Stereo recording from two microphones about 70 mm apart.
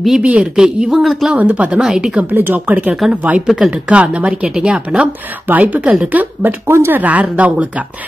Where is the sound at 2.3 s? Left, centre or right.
Right.